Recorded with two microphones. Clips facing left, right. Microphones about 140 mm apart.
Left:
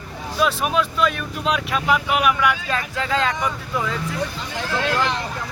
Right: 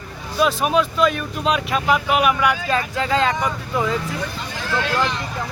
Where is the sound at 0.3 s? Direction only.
Centre (ahead or behind).